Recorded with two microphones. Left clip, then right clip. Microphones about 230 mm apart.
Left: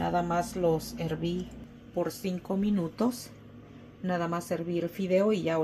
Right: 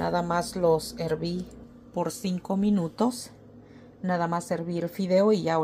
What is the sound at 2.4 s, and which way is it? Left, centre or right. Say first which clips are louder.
Speech: right 4 dB; centre.